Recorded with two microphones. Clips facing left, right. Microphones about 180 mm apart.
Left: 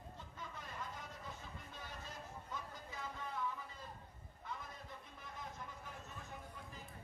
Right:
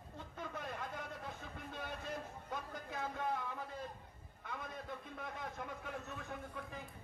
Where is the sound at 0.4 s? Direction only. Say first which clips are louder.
Right 6 dB; 60° right (ahead or behind).